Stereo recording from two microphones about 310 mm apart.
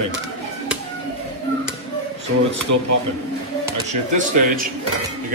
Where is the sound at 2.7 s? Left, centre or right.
Right.